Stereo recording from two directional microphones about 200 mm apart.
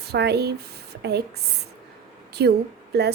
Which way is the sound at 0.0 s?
55° right (ahead or behind).